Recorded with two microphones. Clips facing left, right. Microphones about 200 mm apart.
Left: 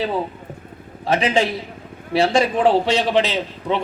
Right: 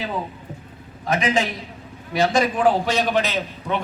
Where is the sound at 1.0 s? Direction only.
30° left (ahead or behind).